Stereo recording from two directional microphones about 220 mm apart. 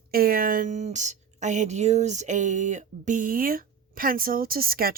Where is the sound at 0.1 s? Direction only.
40° right (ahead or behind).